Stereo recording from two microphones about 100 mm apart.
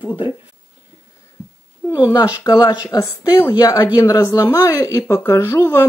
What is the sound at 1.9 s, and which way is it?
Speech, 45° left (ahead or behind).